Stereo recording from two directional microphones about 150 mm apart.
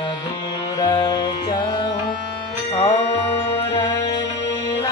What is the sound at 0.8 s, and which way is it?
Music, 30° left (ahead or behind).